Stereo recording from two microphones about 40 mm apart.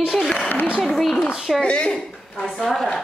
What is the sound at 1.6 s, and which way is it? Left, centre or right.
Speech, left.